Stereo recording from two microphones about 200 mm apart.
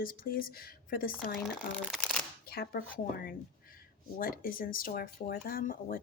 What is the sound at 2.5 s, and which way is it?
Speech, 50° left (ahead or behind).